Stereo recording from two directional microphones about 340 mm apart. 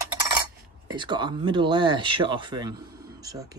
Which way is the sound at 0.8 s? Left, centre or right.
Centre.